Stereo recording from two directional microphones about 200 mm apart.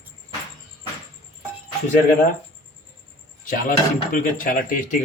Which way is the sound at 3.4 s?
40° left (ahead or behind).